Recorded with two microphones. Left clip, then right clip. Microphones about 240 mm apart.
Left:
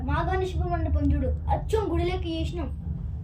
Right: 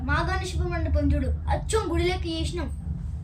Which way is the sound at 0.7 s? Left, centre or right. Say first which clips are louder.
Right 1 dB; right.